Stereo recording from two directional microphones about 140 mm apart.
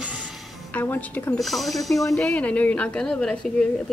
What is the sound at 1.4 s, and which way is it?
A woman's voice, centre (ahead or behind).